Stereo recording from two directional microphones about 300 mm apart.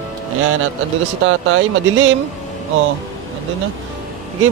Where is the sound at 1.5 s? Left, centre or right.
Right.